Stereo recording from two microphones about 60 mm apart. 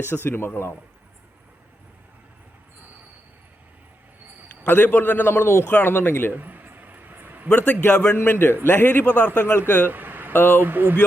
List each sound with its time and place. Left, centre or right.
0.1 s a man's voice: left
4.6 s a man's voice: left
6.3 s a sound: right
7.5 s a man's voice: left
8.1 s a man's voice: left
9.9 s a sound: right
10.3 s a man's voice: left
10.6 s speech: right